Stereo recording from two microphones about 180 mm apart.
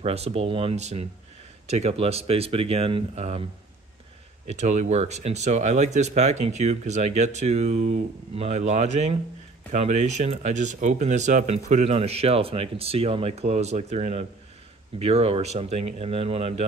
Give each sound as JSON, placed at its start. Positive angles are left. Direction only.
{"t": 0.0, "sound": "speech", "side_deg": -35}
{"t": 4.5, "sound": "speech", "side_deg": -40}